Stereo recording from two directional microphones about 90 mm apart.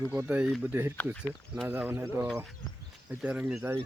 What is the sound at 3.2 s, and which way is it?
Speech, 15° right (ahead or behind).